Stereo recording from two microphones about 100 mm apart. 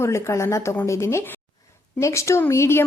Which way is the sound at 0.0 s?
30° left (ahead or behind).